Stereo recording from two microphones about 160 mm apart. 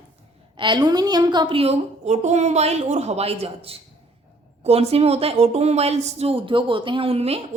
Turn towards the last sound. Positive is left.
turn(degrees=-40)  # may be behind; listen again after turning